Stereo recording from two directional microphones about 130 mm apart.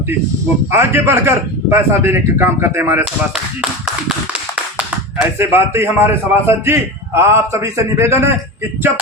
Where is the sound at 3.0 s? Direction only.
5° right (ahead or behind).